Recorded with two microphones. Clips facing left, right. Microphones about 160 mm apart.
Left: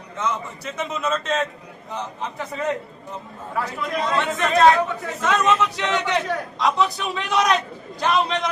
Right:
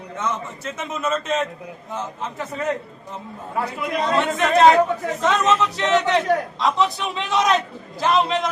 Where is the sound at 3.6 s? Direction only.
25° right (ahead or behind).